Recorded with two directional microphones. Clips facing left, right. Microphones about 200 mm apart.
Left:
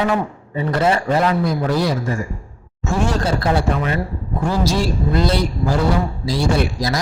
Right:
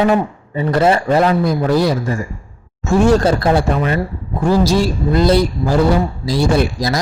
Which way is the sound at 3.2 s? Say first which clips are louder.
Right 4 dB; 40° right (ahead or behind).